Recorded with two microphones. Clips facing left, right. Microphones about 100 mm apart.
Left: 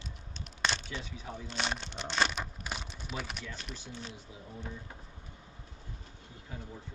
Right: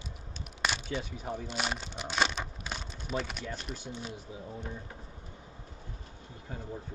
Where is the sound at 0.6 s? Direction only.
10° right (ahead or behind).